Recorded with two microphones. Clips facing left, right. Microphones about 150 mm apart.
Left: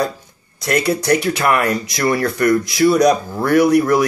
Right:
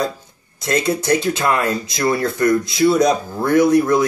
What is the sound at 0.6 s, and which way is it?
Speech, 25° right (ahead or behind).